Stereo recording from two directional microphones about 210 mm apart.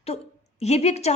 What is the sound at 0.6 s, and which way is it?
Speech, 30° left (ahead or behind).